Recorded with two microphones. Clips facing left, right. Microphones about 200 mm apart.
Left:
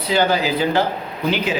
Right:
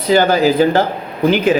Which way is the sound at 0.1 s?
45° right (ahead or behind).